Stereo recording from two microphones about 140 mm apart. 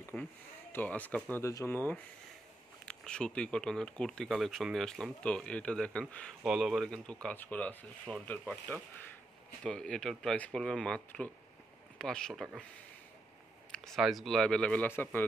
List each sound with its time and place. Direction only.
0.1 s speech: 15° left (ahead or behind)
1.3 s speech: 20° left (ahead or behind); by 12.6 s 5° left (ahead or behind)
13.7 s speech: centre (ahead or behind)